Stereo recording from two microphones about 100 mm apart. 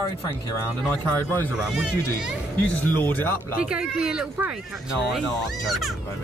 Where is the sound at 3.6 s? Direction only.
10° right (ahead or behind).